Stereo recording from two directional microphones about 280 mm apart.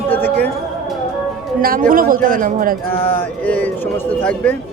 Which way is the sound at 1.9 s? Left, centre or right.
Right.